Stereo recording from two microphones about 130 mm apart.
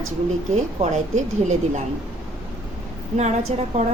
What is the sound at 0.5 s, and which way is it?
Speech, 65° right (ahead or behind).